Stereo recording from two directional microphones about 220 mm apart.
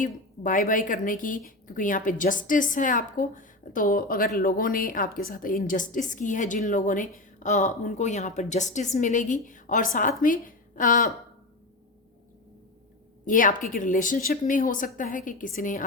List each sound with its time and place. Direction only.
0.0 s a woman's voice: 35° left (ahead or behind)
13.2 s a woman's voice: 35° left (ahead or behind)